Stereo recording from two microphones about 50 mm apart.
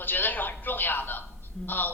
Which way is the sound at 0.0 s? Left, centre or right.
Left.